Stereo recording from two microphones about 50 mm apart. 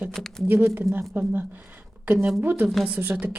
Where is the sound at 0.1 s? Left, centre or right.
Centre.